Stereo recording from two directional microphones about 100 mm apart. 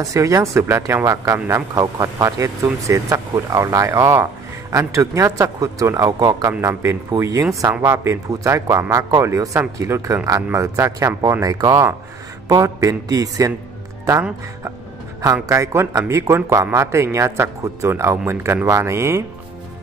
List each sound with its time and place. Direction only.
0.0 s speech: 30° right (ahead or behind)
6.1 s a man's voice: 45° right (ahead or behind)
6.6 s speech: 25° right (ahead or behind)
15.4 s speech: 30° right (ahead or behind)